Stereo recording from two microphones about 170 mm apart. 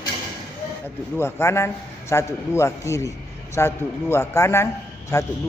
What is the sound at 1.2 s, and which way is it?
A man's voice, 15° left (ahead or behind).